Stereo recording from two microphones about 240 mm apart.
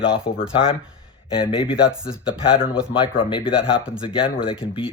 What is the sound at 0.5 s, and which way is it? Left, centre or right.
Speech, left.